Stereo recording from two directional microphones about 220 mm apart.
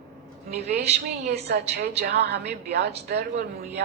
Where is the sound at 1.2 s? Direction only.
30° right (ahead or behind).